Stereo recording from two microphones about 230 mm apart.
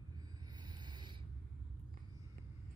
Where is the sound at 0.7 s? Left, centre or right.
Centre.